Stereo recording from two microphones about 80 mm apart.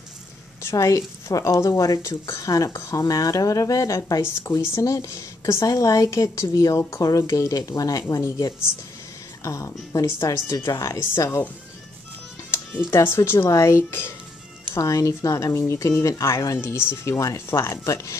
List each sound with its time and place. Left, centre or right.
0.6 s speech: left
11.0 s speech: left
12.9 s speech: left
14.7 s speech: left